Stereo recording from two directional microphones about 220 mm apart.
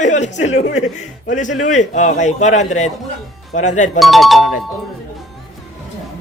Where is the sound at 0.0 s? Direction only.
35° left (ahead or behind).